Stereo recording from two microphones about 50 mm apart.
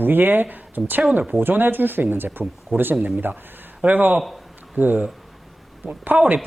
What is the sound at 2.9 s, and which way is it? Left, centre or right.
Speech, right.